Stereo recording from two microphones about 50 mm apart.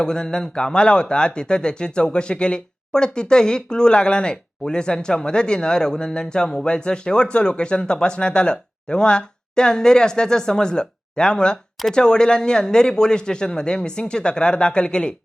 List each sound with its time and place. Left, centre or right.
0.0 s speech: centre